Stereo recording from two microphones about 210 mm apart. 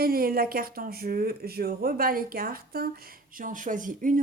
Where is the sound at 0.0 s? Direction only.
45° right (ahead or behind).